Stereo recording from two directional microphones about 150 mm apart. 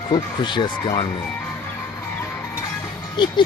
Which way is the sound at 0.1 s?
30° left (ahead or behind).